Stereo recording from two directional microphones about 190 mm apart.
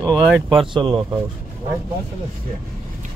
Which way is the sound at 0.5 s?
25° right (ahead or behind).